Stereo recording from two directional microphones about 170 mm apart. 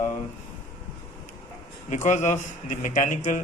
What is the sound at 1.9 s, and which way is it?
Speech, 45° left (ahead or behind).